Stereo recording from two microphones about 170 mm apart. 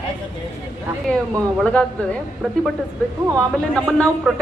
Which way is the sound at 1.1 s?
5° left (ahead or behind).